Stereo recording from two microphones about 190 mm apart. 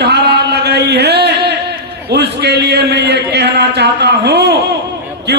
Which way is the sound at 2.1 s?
60° right (ahead or behind).